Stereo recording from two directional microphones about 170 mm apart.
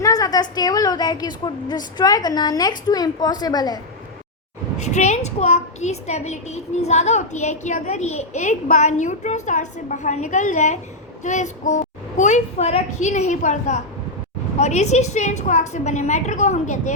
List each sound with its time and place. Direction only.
0.0 s a woman's voice: 20° left (ahead or behind)
4.8 s a woman's voice: 45° left (ahead or behind)